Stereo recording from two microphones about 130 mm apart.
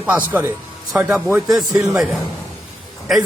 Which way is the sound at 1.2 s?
20° right (ahead or behind).